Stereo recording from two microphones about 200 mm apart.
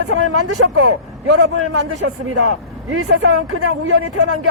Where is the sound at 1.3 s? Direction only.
60° right (ahead or behind).